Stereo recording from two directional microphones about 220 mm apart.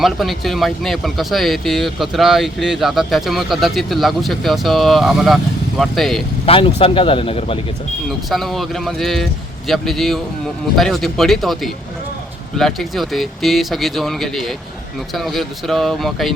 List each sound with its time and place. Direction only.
0.0 s speech: centre (ahead or behind)
6.4 s speech: 25° left (ahead or behind)
8.3 s speech: centre (ahead or behind)